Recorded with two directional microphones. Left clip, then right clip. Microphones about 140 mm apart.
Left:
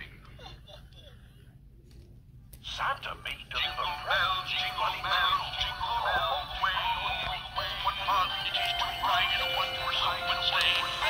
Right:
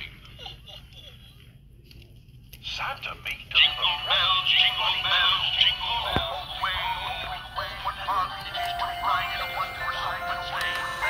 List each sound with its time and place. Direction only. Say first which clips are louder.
0.0 s a sound: right 7 dB; 20° left (ahead or behind)
2.7 s speech: even; 5° left (ahead or behind)
3.5 s music: right 11 dB; 15° right (ahead or behind)
4.7 s speech: right 5 dB; centre (ahead or behind)
6.3 s music: right 1 dB; 10° right (ahead or behind)
7.3 s music: right 1 dB; 20° left (ahead or behind); by 10.7 s 55° left (ahead or behind)